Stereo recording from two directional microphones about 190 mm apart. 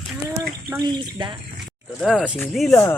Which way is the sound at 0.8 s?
25° right (ahead or behind).